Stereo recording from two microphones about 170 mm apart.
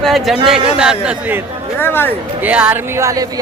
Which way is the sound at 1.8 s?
10° left (ahead or behind).